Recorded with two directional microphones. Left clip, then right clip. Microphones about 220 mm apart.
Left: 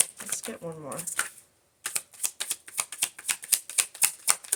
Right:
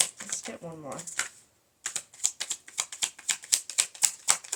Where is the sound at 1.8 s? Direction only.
20° left (ahead or behind).